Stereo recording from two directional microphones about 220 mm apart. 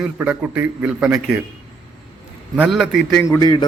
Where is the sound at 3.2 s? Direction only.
15° left (ahead or behind).